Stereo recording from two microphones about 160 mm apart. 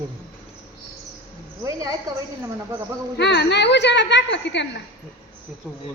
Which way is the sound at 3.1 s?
90° left.